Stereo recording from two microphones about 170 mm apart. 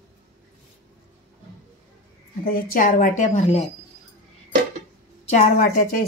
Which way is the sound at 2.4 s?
60° left (ahead or behind).